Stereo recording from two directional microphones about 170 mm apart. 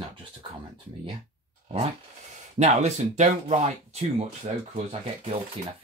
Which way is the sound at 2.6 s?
40° right (ahead or behind).